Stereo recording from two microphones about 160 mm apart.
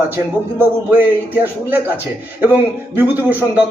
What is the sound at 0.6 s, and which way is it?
Speech, 10° right (ahead or behind).